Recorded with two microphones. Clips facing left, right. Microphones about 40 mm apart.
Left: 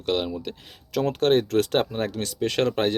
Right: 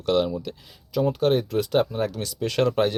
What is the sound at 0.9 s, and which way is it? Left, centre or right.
Speech, left.